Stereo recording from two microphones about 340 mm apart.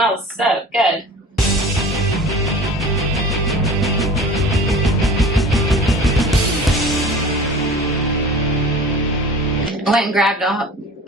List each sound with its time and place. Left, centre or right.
0.0 s speech: centre
4.5 s music: centre
9.8 s speech: centre